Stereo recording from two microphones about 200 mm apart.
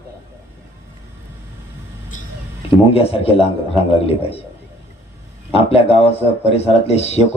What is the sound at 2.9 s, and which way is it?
A man's voice, 30° left (ahead or behind).